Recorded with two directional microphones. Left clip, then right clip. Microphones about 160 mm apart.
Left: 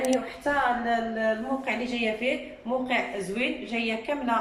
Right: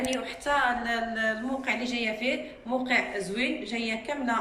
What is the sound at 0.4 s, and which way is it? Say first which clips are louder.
A woman's voice: even; 30° left (ahead or behind).